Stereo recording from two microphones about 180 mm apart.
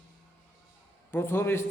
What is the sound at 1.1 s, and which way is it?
Speech, 15° left (ahead or behind).